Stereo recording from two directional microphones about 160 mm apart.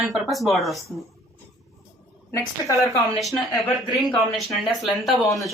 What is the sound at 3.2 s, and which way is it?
Speech, centre (ahead or behind).